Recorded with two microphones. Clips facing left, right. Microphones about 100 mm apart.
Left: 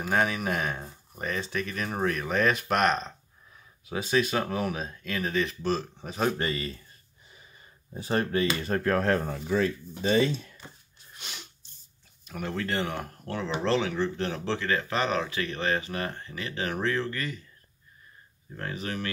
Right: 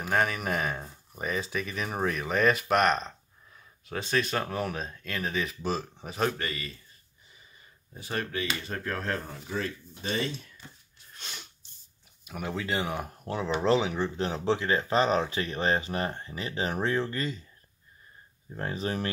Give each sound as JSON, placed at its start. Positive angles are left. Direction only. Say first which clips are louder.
{"t": 0.0, "sound": "speech", "louder": "left 1 dB", "side_deg": 0}
{"t": 6.3, "sound": "a man's voice", "louder": "left 5 dB", "side_deg": 30}
{"t": 7.9, "sound": "speech", "louder": "left 6 dB", "side_deg": 30}
{"t": 11.1, "sound": "sneeze", "louder": "even", "side_deg": 5}
{"t": 12.3, "sound": "speech", "louder": "left 1 dB", "side_deg": -10}
{"t": 18.5, "sound": "speech", "louder": "right 2 dB", "side_deg": -30}